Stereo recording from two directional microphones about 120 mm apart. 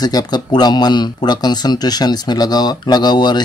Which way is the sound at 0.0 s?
35° left (ahead or behind).